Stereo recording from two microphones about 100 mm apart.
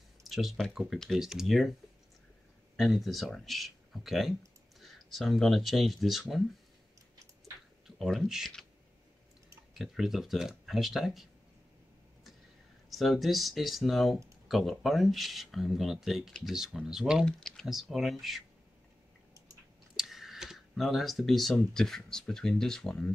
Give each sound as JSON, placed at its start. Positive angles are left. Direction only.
{"t": 0.2, "sound": "speech", "side_deg": 0}
{"t": 2.7, "sound": "speech", "side_deg": 0}
{"t": 7.8, "sound": "a sound", "side_deg": -5}
{"t": 8.3, "sound": "speech", "side_deg": 0}
{"t": 9.8, "sound": "speech", "side_deg": 0}
{"t": 12.9, "sound": "speech", "side_deg": 0}
{"t": 20.0, "sound": "speech", "side_deg": -5}